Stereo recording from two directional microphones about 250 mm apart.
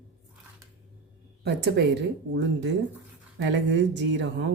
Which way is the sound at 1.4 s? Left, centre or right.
Right.